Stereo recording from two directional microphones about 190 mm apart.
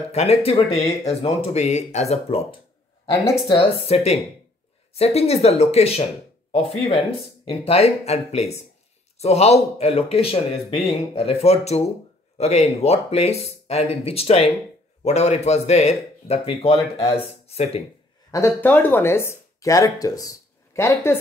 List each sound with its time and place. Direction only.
0.1 s speech: 30° left (ahead or behind)
3.4 s speech: 30° left (ahead or behind)
18.3 s speech: 10° left (ahead or behind)